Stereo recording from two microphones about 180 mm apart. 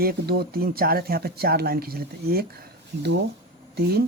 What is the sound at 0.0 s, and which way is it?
Speech, 60° right (ahead or behind).